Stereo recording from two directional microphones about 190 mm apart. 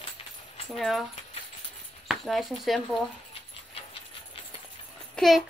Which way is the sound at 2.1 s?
Centre (ahead or behind).